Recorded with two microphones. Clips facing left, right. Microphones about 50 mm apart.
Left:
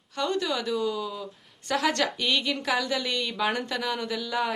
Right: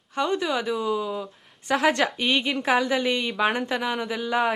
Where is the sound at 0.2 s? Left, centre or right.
Right.